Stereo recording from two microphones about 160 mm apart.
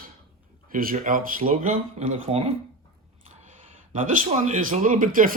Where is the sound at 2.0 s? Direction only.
45° right (ahead or behind).